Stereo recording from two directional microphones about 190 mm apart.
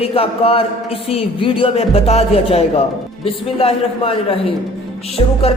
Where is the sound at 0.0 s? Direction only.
30° left (ahead or behind).